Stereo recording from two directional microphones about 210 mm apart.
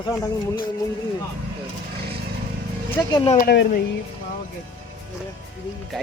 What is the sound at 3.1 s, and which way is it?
Speech, 25° left (ahead or behind).